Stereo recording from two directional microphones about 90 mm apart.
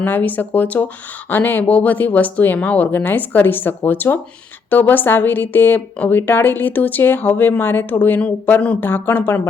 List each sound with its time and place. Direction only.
0.0 s a woman's voice: 20° left (ahead or behind)